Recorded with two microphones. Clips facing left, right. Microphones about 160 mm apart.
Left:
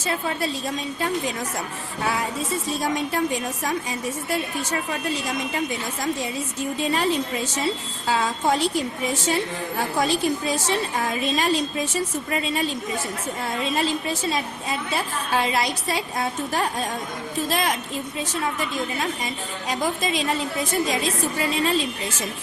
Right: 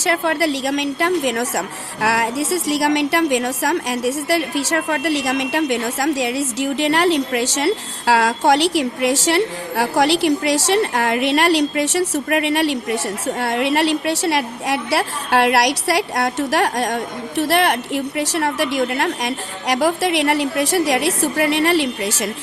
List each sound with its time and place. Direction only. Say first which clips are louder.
0.0 s a woman's voice: right 7 dB; 75° right (ahead or behind)